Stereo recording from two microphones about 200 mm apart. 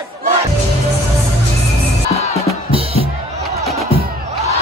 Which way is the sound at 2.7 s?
30° right (ahead or behind).